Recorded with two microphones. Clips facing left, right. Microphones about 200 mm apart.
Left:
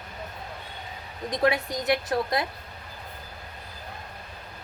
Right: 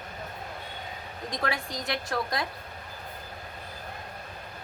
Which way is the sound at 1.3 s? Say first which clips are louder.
Left 7 dB; 25° left (ahead or behind).